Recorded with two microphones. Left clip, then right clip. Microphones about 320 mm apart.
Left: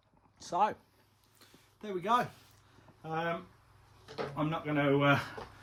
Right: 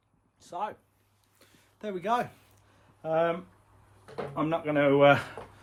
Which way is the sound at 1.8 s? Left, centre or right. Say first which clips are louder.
Right 1 dB; centre.